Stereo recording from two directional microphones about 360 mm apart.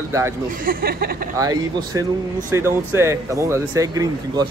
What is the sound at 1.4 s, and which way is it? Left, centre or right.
Speech, centre.